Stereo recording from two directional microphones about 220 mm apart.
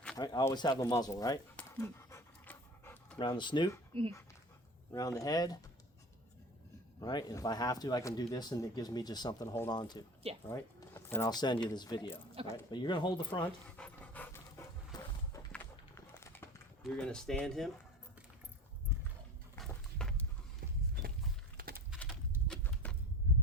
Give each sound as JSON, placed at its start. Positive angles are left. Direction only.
{"t": 0.2, "sound": "speech", "side_deg": 20}
{"t": 1.5, "sound": "dog", "side_deg": 10}
{"t": 3.2, "sound": "speech", "side_deg": 20}
{"t": 4.9, "sound": "speech", "side_deg": 15}
{"t": 7.0, "sound": "speech", "side_deg": 20}
{"t": 13.4, "sound": "dog", "side_deg": 5}
{"t": 16.8, "sound": "speech", "side_deg": 5}
{"t": 19.5, "sound": "horse", "side_deg": 0}
{"t": 20.6, "sound": "horse", "side_deg": -45}
{"t": 21.6, "sound": "a sound", "side_deg": -45}
{"t": 22.4, "sound": "horse", "side_deg": 5}